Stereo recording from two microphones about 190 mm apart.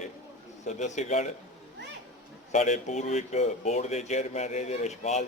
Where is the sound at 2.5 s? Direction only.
40° left (ahead or behind).